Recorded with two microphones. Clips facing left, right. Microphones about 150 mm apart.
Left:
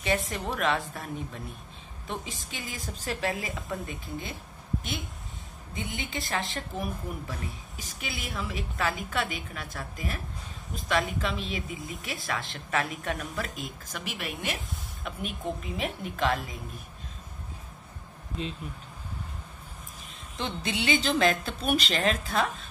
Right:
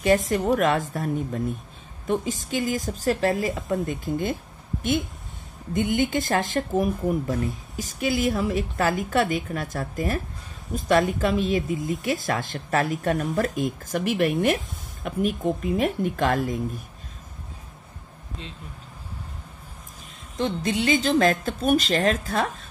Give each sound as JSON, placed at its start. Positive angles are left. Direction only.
{"t": 0.0, "sound": "speech", "side_deg": -45}
{"t": 5.8, "sound": "speech", "side_deg": -50}
{"t": 20.4, "sound": "speech", "side_deg": -45}